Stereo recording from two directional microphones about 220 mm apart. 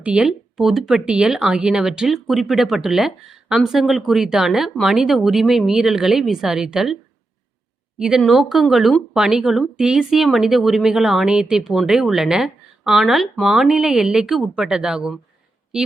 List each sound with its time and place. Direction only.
0.0 s speech: 5° right (ahead or behind)
7.9 s speech: 5° right (ahead or behind)